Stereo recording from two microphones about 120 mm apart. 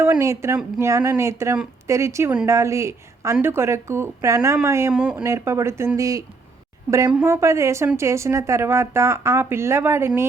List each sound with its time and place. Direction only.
0.0 s speech: 20° right (ahead or behind)
4.9 s speech: 10° right (ahead or behind)
5.2 s speech: 25° right (ahead or behind)
7.3 s speech: 25° right (ahead or behind)